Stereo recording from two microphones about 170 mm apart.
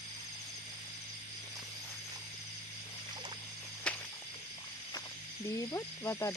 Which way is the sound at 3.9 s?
5° left (ahead or behind).